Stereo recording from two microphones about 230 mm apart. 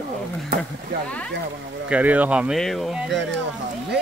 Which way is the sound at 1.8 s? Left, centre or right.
Centre.